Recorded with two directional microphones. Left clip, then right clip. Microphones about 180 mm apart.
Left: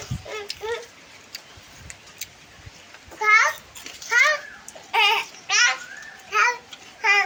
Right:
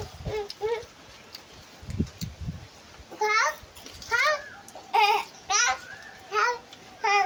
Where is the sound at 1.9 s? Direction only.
10° left (ahead or behind).